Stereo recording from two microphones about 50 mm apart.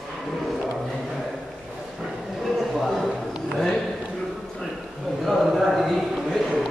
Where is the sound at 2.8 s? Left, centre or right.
Centre.